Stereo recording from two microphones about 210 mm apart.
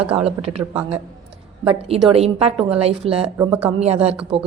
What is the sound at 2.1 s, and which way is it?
A woman's voice, 30° right (ahead or behind).